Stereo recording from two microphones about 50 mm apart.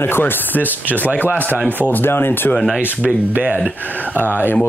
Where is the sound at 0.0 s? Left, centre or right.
Left.